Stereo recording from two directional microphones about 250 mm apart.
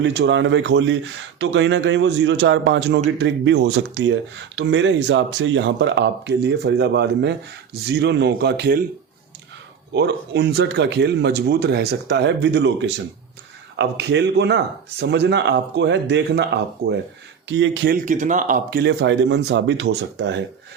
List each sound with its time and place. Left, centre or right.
0.0 s speech: right
9.9 s speech: right